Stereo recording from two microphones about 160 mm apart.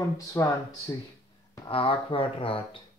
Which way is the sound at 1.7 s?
35° left (ahead or behind).